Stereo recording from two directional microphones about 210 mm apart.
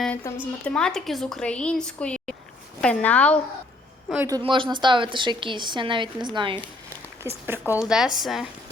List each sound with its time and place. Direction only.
0.0 s a woman's voice: 10° left (ahead or behind)
4.1 s a woman's voice: 15° right (ahead or behind)
7.3 s a woman's voice: 10° right (ahead or behind)